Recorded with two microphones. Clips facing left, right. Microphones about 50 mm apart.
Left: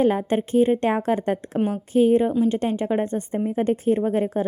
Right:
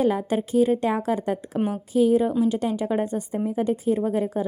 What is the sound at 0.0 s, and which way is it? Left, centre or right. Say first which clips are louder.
A woman's voice: left 2 dB; left.